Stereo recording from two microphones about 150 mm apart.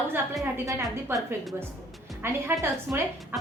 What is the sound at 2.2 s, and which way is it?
Speech, 15° right (ahead or behind).